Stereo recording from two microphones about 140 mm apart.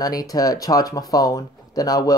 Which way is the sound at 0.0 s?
25° left (ahead or behind).